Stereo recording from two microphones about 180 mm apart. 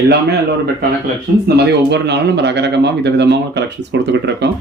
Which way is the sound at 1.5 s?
70° right (ahead or behind).